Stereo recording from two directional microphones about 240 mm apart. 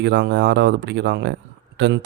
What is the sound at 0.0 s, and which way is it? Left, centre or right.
Speech, right.